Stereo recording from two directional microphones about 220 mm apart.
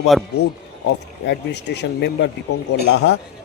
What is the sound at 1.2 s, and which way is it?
Speech, 50° left (ahead or behind).